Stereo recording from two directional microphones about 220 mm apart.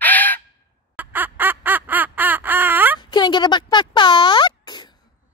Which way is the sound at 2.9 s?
20° left (ahead or behind).